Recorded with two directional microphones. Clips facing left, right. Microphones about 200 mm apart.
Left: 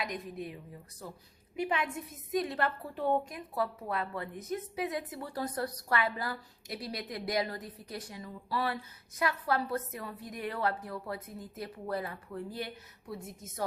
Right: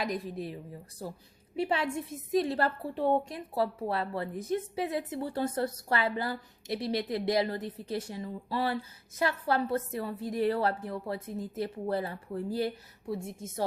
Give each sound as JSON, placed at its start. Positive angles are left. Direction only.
{"t": 0.0, "sound": "a woman's voice", "side_deg": -35}